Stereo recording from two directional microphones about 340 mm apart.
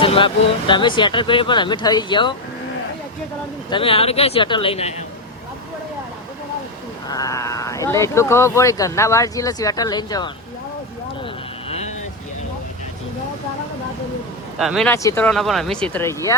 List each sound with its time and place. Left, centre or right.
0.0 s vehicle: centre
0.7 s speech: centre
3.7 s speech: centre
7.1 s speech: centre
11.7 s vehicle: centre
14.6 s speech: centre